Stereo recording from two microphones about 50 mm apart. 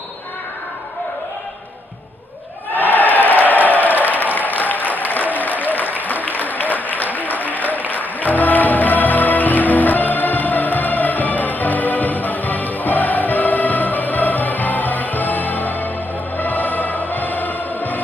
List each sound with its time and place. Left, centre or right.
2.8 s a sound: left
4.4 s applause: left
6.2 s applause: left
7.9 s music: left